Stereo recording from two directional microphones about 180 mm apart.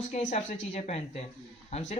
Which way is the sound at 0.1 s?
40° left (ahead or behind).